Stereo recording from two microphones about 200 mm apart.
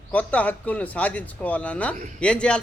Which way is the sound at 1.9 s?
40° right (ahead or behind).